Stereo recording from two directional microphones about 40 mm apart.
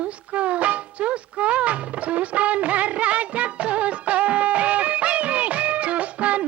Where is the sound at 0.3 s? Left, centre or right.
Right.